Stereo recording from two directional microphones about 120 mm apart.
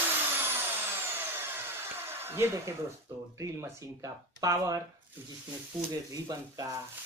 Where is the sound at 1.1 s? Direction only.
20° right (ahead or behind).